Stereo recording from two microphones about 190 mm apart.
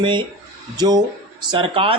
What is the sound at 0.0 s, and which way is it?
A man's voice, 25° right (ahead or behind).